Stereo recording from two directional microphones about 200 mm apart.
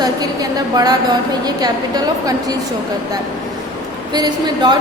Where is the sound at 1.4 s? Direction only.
20° right (ahead or behind).